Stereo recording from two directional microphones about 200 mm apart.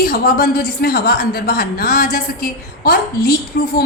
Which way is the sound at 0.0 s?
45° left (ahead or behind).